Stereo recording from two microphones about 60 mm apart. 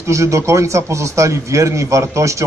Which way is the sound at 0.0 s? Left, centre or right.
Right.